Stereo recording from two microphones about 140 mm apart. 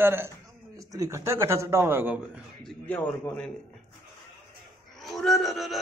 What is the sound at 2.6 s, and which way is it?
Speech, 10° left (ahead or behind).